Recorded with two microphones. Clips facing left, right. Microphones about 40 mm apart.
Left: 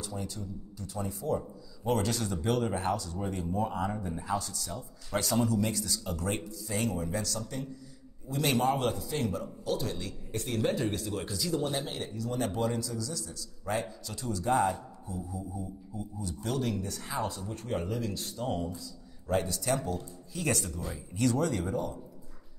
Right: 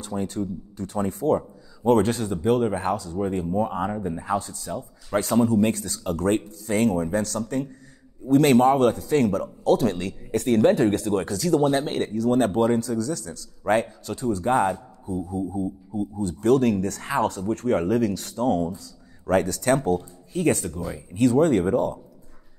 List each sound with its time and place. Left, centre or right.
0.0 s a man's voice: right
2.2 s a man's voice: right
20.3 s speech: right